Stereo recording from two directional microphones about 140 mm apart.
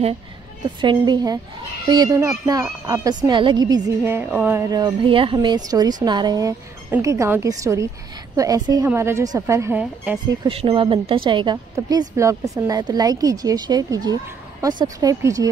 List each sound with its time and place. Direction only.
0.7 s a woman's voice: 35° right (ahead or behind); by 4.6 s 15° right (ahead or behind)
4.6 s a woman's voice: 30° right (ahead or behind)
10.2 s a woman's voice: 30° right (ahead or behind)